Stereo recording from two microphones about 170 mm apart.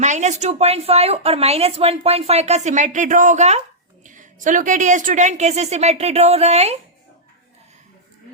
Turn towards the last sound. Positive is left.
turn(degrees=-40)  # may be behind; listen again after turning